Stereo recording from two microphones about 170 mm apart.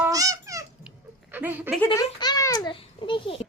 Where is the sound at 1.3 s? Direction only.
10° right (ahead or behind).